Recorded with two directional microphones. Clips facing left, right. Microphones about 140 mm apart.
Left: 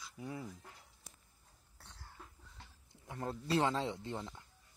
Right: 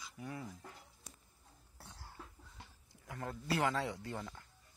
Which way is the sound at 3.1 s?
25° left (ahead or behind).